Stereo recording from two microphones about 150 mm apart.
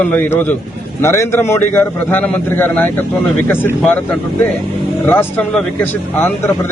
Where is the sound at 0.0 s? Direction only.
10° left (ahead or behind).